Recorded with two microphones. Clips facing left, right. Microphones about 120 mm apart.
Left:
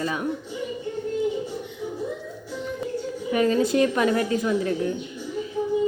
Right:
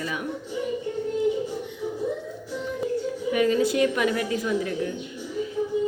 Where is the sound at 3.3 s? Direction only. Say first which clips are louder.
Left 2 dB; 35° left (ahead or behind).